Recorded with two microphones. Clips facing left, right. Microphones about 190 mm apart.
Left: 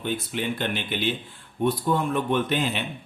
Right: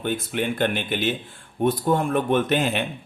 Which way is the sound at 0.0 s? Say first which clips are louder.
Right 3 dB; 55° right (ahead or behind).